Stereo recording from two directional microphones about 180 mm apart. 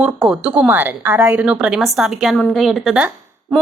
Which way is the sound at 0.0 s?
5° right (ahead or behind).